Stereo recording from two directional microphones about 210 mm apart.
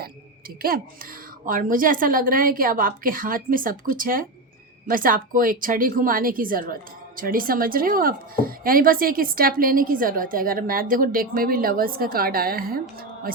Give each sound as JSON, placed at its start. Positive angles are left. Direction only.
{"t": 0.0, "sound": "a woman's voice", "side_deg": -45}